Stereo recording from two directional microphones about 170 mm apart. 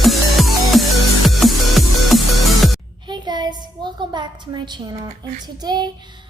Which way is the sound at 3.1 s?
25° right (ahead or behind).